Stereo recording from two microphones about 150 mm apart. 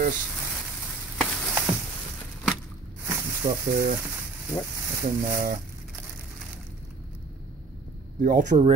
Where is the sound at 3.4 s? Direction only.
20° right (ahead or behind).